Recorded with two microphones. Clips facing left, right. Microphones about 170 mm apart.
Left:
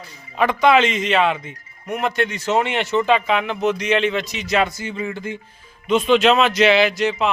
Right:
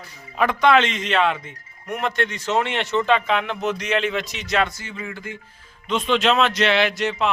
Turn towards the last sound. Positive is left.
turn(degrees=0)  # may be behind; listen again after turning